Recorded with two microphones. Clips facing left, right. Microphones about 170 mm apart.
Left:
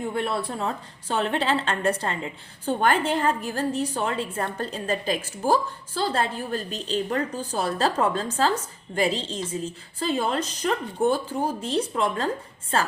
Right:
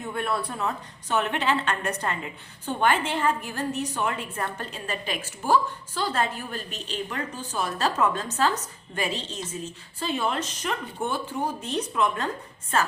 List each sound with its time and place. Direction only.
0.0 s a woman's voice: 25° left (ahead or behind)